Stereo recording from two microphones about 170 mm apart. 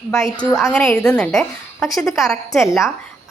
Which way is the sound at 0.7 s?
5° left (ahead or behind).